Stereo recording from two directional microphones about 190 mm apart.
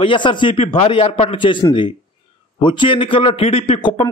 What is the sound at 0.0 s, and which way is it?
A man's voice, 25° left (ahead or behind).